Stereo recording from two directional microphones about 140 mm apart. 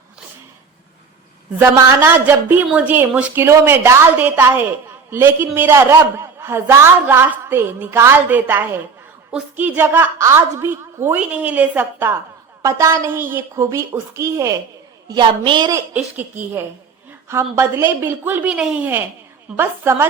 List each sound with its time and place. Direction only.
1.5 s a man's voice: 20° right (ahead or behind)
15.1 s a woman's voice: 35° right (ahead or behind)
15.9 s a man's voice: 10° right (ahead or behind)